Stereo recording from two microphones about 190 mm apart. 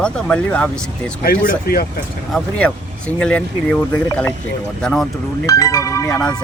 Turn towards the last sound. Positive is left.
turn(degrees=5)  # may be behind; listen again after turning